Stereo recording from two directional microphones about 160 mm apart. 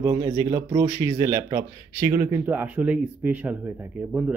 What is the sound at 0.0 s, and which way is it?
A man's voice, 25° right (ahead or behind).